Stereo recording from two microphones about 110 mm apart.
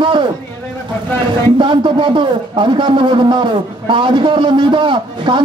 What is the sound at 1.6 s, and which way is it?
A man's voice, 45° right (ahead or behind).